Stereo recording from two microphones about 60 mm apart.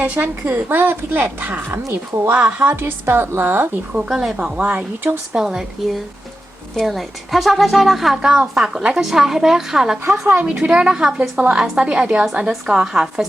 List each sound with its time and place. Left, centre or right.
0.0 s a woman's voice: right
2.5 s speech: right
2.7 s a woman's voice: right
4.1 s a woman's voice: centre
4.5 s speech: right
5.3 s a woman's voice: centre